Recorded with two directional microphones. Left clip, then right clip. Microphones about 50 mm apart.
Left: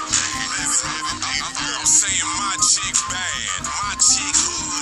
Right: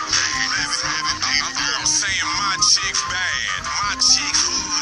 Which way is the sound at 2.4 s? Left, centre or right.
Left.